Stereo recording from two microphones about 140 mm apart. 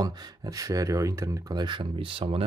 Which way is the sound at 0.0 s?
30° right (ahead or behind).